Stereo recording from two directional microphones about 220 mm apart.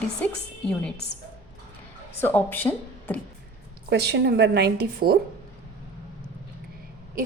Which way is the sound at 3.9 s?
50° right (ahead or behind).